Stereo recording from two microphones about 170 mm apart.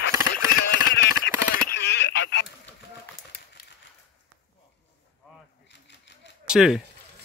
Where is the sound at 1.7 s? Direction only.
90° left.